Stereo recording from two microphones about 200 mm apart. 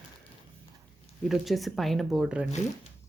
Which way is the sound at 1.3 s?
Centre (ahead or behind).